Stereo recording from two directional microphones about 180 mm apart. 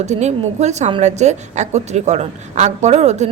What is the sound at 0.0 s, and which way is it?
A woman's voice, 40° right (ahead or behind).